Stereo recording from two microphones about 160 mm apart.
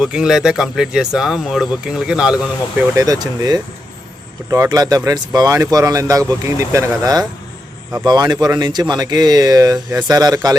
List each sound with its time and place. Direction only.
0.0 s speech: 5° right (ahead or behind)
3.0 s speech: 20° right (ahead or behind)